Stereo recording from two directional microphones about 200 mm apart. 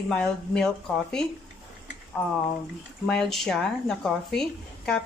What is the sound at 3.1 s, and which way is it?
A woman's voice, centre (ahead or behind).